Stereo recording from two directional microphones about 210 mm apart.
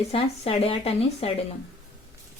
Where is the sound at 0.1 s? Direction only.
25° left (ahead or behind).